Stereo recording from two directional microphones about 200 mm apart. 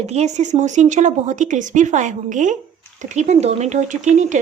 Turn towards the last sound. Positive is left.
turn(degrees=-35)  # may be behind; listen again after turning